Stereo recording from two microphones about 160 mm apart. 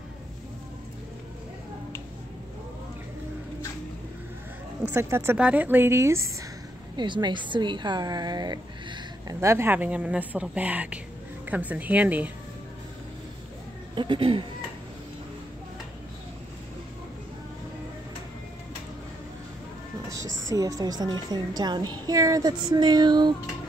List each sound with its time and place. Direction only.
4.8 s speech: 15° right (ahead or behind)
7.0 s a woman's voice: 30° right (ahead or behind); by 12.3 s 10° right (ahead or behind)
13.9 s speech: 30° right (ahead or behind)
20.2 s a woman's voice: 20° right (ahead or behind)